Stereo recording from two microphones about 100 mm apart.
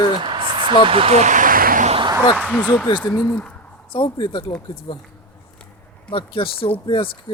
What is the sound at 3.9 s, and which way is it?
Speech, 55° left (ahead or behind).